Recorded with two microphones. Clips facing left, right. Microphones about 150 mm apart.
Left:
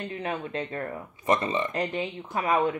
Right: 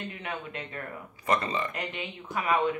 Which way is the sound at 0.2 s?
35° left (ahead or behind).